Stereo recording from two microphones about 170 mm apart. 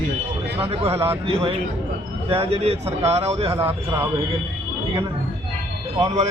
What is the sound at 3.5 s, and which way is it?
Speech, 15° right (ahead or behind).